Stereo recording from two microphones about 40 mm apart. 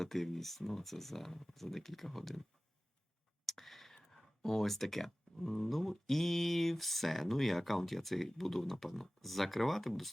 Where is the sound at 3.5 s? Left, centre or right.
Centre.